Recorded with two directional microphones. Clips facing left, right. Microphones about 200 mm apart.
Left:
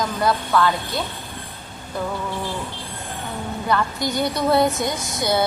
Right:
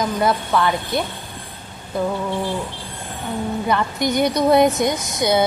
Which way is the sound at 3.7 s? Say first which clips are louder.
Right 1 dB; 20° right (ahead or behind).